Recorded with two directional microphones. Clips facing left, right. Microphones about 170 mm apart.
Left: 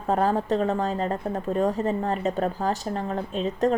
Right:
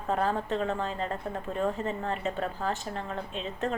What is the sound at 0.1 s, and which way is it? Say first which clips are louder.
Speech: left 6 dB; 40° left (ahead or behind).